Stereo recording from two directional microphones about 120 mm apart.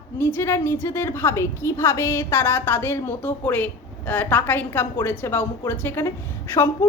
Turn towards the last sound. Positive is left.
turn(degrees=20)  # may be behind; listen again after turning